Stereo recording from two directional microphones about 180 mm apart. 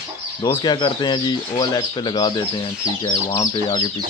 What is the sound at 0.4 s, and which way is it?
Speech, 25° left (ahead or behind).